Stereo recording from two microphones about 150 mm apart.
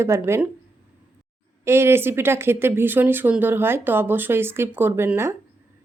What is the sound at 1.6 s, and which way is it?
Speech, 15° right (ahead or behind).